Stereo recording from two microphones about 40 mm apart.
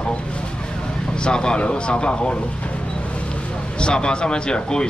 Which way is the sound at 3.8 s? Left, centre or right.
Left.